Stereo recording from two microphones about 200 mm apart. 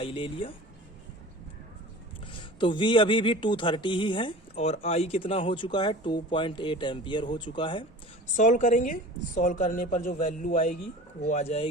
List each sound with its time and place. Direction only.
0.0 s speech: 25° left (ahead or behind)
2.2 s speech: 25° left (ahead or behind)
8.4 s a woman's voice: 40° left (ahead or behind)